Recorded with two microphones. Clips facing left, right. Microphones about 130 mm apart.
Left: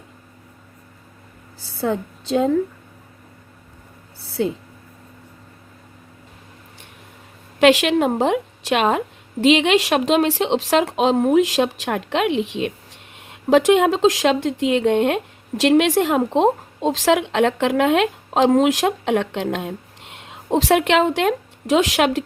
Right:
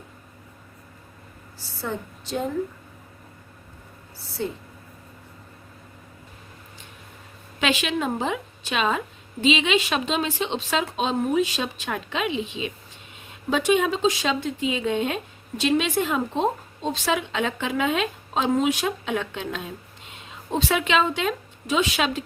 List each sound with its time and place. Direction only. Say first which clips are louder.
4.4 s speech: left 7 dB; 90° left
7.6 s a woman's voice: left 10 dB; 75° left (ahead or behind)